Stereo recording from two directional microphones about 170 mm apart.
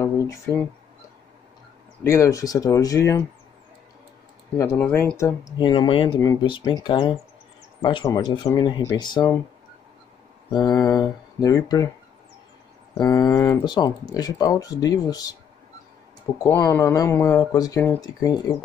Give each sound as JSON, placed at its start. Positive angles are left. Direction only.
{"t": 0.0, "sound": "a sound", "side_deg": 20}
{"t": 2.0, "sound": "speech", "side_deg": 15}
{"t": 4.6, "sound": "speech", "side_deg": 15}
{"t": 5.1, "sound": "speech", "side_deg": 20}
{"t": 10.5, "sound": "speech", "side_deg": 25}
{"t": 13.2, "sound": "speech", "side_deg": 20}
{"t": 16.4, "sound": "speech", "side_deg": 15}